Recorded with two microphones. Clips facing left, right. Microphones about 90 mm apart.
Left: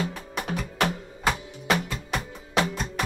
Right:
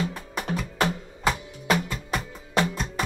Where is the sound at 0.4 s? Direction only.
Centre (ahead or behind).